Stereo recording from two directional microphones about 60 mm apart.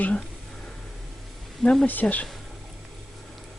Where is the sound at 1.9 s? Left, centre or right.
Left.